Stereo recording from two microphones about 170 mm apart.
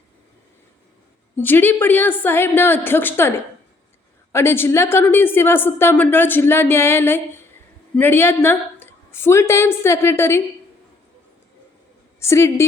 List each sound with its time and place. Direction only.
1.4 s a woman's voice: 10° left (ahead or behind)
12.2 s a woman's voice: 15° left (ahead or behind)